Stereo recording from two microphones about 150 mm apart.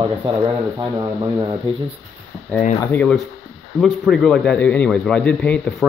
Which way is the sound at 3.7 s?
Centre (ahead or behind).